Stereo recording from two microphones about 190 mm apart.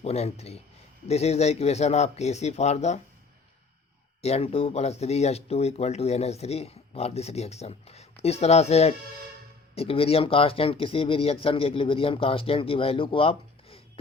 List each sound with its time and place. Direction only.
0.0 s speech: 35° left (ahead or behind)
4.2 s speech: 30° left (ahead or behind)